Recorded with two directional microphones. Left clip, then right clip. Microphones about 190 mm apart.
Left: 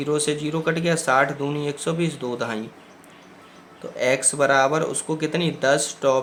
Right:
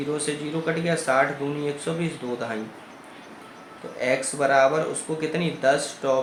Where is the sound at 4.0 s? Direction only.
35° left (ahead or behind).